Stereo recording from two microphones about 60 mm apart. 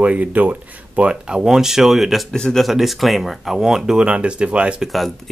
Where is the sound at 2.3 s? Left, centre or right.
Centre.